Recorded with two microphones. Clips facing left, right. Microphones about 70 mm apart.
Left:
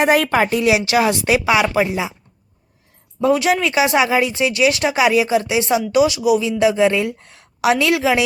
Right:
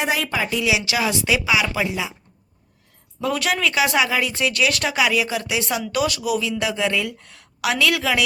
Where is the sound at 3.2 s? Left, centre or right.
Centre.